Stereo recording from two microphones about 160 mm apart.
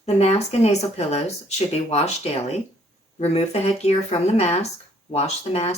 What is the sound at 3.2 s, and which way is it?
Speech, 40° left (ahead or behind).